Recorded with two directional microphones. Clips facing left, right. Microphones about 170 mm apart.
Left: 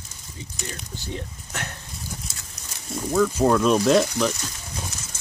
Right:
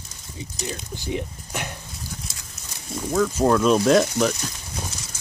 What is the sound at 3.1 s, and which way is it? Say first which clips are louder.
Speech: even; centre (ahead or behind).